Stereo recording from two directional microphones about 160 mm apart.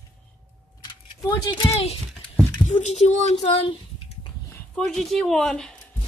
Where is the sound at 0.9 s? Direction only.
25° left (ahead or behind).